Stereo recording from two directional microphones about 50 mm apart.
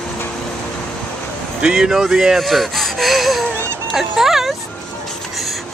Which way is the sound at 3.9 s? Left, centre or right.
Centre.